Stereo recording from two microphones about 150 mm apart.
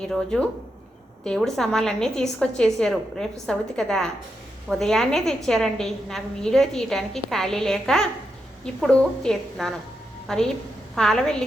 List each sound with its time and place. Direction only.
0.0 s a woman's voice: 5° left (ahead or behind)